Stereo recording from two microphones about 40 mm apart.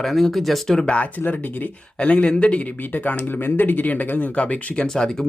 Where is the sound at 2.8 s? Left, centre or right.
Left.